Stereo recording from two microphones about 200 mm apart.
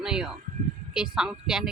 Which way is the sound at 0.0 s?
5° right (ahead or behind).